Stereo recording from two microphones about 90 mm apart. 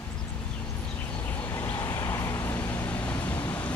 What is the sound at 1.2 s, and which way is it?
Vehicle, 20° left (ahead or behind).